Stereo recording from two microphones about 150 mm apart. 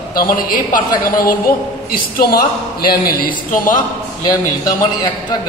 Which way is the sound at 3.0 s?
70° left (ahead or behind).